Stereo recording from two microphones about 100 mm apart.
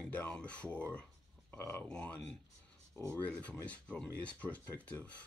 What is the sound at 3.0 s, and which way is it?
Speech, 30° right (ahead or behind).